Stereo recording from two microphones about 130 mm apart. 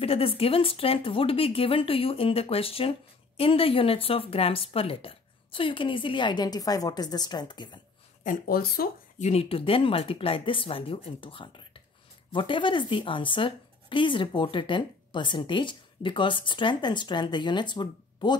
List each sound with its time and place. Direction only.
0.0 s speech: 50° left (ahead or behind)
9.2 s speech: 55° left (ahead or behind); by 18.4 s 35° left (ahead or behind)